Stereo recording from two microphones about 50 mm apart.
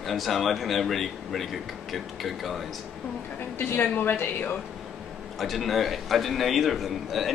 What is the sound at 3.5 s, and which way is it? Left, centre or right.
Speech, left.